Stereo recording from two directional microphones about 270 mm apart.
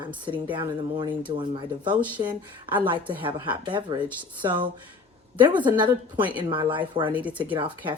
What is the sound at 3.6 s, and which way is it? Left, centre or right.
Speech, centre.